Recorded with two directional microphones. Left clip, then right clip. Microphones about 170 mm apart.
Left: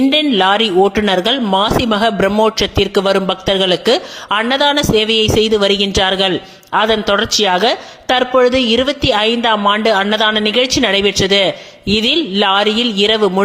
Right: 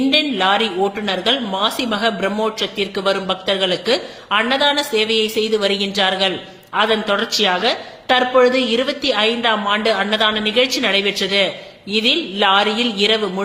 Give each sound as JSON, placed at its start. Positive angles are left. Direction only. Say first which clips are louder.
{"t": 0.1, "sound": "speech", "louder": "left 4 dB", "side_deg": 40}